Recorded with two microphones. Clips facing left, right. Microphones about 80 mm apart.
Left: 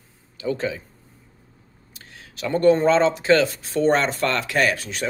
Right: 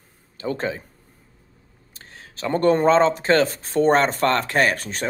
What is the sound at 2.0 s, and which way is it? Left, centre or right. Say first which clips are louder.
Speech: even; right.